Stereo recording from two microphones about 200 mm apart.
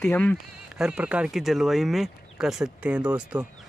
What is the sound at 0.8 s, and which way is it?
Speech, 5° right (ahead or behind).